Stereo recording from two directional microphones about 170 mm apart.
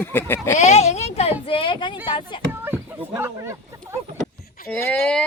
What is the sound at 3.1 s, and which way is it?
Speech, 15° right (ahead or behind).